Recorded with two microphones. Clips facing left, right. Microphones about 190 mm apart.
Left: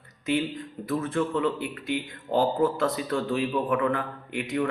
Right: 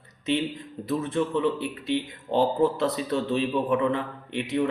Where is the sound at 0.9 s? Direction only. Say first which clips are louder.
Right 1 dB; 20° right (ahead or behind).